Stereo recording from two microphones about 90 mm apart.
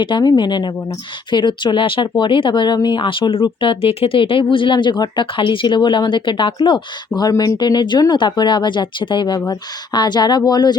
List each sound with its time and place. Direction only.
0.0 s speech: 60° left (ahead or behind)
3.6 s speech: 80° left
4.5 s speech: 65° left (ahead or behind)
7.2 s speech: 45° left (ahead or behind)